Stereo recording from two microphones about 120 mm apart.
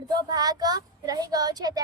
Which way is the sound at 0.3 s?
35° right (ahead or behind).